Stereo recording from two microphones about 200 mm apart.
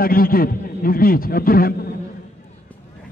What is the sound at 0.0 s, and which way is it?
A man's voice, 45° left (ahead or behind).